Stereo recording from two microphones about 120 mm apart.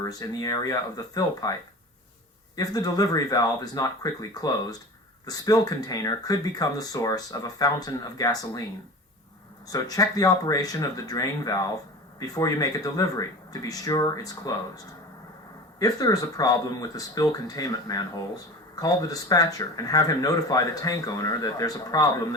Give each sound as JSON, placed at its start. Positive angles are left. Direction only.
{"t": 0.0, "sound": "speech", "side_deg": 30}
{"t": 2.6, "sound": "speech", "side_deg": 35}
{"t": 9.7, "sound": "speech", "side_deg": 30}
{"t": 15.8, "sound": "speech", "side_deg": 30}